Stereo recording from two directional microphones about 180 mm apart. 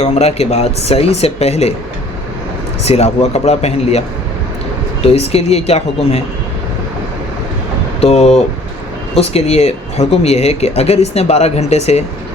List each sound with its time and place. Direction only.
0.0 s speech: 35° left (ahead or behind)
2.8 s speech: 35° left (ahead or behind)
5.0 s speech: 35° left (ahead or behind)
8.0 s speech: 35° left (ahead or behind)